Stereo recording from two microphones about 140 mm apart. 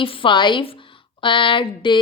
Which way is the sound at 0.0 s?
40° left (ahead or behind).